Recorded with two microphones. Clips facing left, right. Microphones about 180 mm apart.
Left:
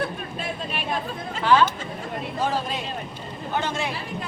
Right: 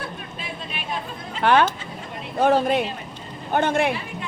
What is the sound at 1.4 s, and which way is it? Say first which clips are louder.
Speech: right 1 dB; 60° right (ahead or behind).